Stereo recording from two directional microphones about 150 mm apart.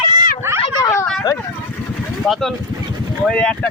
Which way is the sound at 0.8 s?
20° left (ahead or behind).